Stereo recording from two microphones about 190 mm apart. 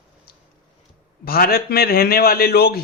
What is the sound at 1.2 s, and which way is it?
A man's voice, 55° left (ahead or behind).